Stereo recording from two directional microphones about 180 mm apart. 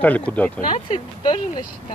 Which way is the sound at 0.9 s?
25° left (ahead or behind).